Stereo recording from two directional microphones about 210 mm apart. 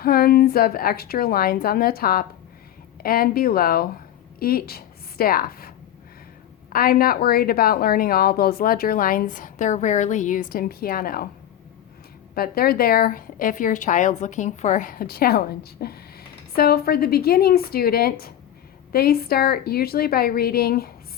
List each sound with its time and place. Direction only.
0.0 s a woman's voice: 45° left (ahead or behind)
6.7 s a woman's voice: 45° left (ahead or behind)
12.3 s a woman's voice: 45° left (ahead or behind)